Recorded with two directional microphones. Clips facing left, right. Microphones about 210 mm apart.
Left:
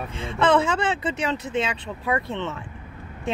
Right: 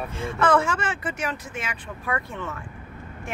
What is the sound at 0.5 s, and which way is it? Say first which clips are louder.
Speech: left 2 dB; 25° left (ahead or behind).